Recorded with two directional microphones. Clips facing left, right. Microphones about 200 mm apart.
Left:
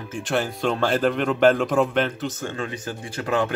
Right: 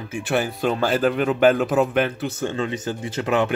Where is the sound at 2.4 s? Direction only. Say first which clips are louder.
Right 5 dB; 20° right (ahead or behind).